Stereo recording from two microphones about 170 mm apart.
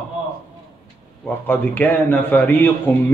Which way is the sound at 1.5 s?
10° left (ahead or behind).